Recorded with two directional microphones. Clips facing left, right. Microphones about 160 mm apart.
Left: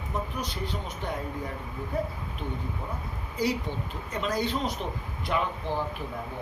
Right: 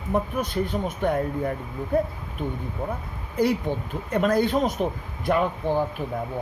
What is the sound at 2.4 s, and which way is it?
Speech, 50° right (ahead or behind).